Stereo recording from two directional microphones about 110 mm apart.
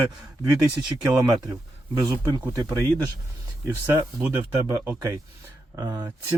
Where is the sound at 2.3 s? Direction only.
30° right (ahead or behind).